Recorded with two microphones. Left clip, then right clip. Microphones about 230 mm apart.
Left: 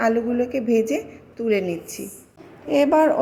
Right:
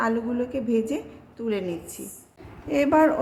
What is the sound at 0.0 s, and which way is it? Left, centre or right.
A woman's voice, centre.